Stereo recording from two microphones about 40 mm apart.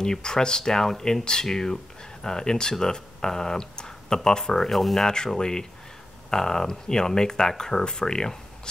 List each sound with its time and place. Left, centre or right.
0.0 s speech: centre
5.0 s speech: centre